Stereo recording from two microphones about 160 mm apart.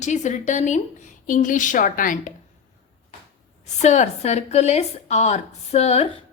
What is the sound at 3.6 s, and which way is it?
Speech, 45° left (ahead or behind).